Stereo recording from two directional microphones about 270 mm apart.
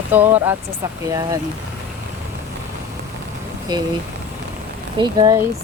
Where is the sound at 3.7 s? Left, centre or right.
Centre.